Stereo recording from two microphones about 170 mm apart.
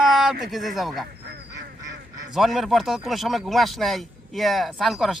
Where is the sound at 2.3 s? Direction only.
Centre (ahead or behind).